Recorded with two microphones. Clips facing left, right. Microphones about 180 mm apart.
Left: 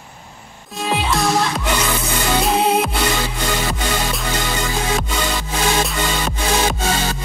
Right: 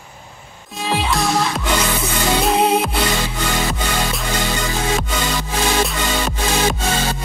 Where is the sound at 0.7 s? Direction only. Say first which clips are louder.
Even; centre (ahead or behind).